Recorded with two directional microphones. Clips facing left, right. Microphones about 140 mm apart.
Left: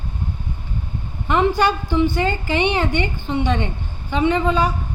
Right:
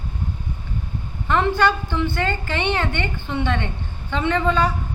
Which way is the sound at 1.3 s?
15° left (ahead or behind).